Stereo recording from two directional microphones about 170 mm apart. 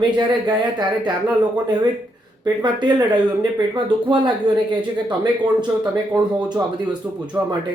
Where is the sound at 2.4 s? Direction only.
25° right (ahead or behind).